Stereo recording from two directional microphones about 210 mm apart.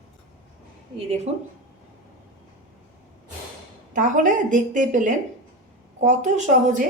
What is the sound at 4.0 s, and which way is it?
A woman's voice, 35° right (ahead or behind).